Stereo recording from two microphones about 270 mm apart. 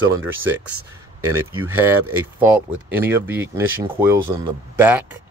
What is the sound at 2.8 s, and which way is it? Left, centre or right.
Speech, centre.